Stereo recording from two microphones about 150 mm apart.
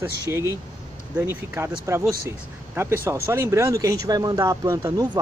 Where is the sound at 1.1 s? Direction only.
15° right (ahead or behind).